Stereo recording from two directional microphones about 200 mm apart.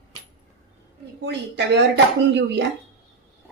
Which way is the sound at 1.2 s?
55° right (ahead or behind).